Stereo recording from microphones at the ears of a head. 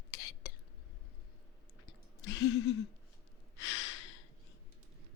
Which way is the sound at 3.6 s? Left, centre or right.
Left.